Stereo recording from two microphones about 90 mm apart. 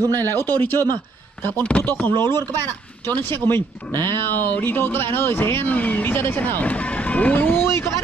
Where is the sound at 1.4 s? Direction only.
25° left (ahead or behind).